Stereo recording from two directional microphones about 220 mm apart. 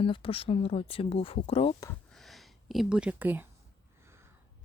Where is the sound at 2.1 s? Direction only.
Centre (ahead or behind).